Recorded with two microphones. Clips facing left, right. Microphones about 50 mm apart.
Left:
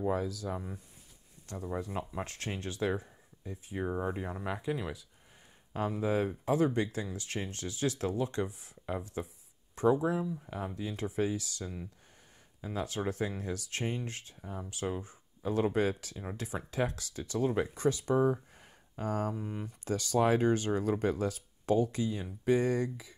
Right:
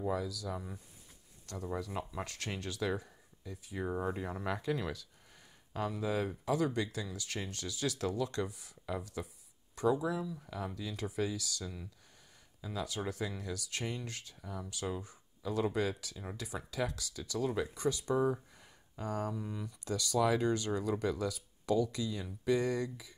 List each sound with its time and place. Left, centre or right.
0.1 s speech: left
2.2 s speech: left
3.8 s speech: centre
5.7 s speech: left